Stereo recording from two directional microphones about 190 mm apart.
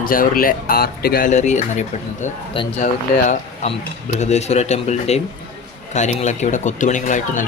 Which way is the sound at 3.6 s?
40° left (ahead or behind).